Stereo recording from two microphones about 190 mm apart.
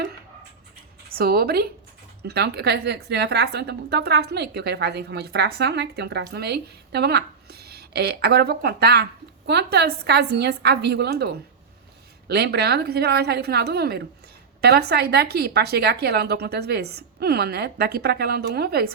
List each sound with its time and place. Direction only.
1.1 s a woman's voice: 50° right (ahead or behind)